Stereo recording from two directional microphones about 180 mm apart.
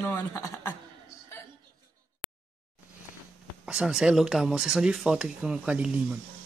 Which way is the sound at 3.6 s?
5° right (ahead or behind).